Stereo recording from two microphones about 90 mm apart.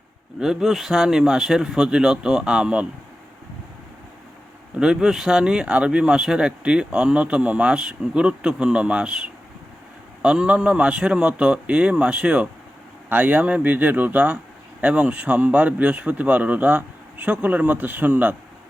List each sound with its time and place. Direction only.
0.3 s speech: 5° right (ahead or behind)
4.8 s speech: 5° right (ahead or behind)